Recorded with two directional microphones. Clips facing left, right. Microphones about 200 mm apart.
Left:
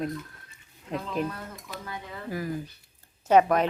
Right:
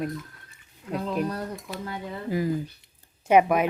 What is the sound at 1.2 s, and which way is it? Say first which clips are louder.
Speech: right 5 dB; 40° right (ahead or behind).